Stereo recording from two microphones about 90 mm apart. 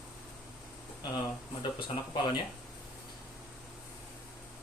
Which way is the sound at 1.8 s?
60° left (ahead or behind).